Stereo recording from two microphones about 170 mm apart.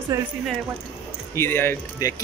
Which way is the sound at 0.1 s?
15° right (ahead or behind).